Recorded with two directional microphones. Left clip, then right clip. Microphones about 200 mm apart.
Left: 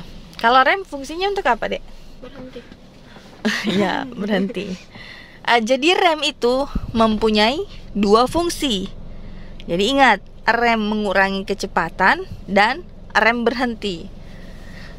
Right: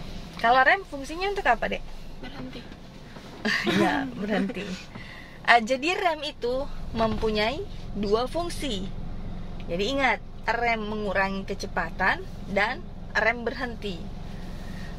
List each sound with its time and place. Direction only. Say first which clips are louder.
0.4 s speech: left 5 dB; 50° left (ahead or behind)
3.4 s speech: left 4 dB; 45° left (ahead or behind)